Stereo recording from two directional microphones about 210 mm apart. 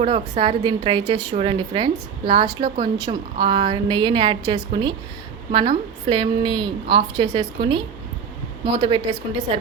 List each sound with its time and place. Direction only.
0.0 s a woman's voice: 25° right (ahead or behind)